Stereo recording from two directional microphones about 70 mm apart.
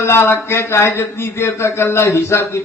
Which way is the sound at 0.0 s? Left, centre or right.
Left.